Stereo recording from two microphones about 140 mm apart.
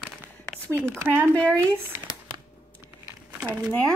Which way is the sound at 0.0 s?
15° right (ahead or behind).